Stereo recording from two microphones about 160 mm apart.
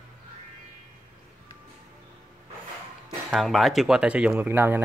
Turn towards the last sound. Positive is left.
turn(degrees=-15)  # may be behind; listen again after turning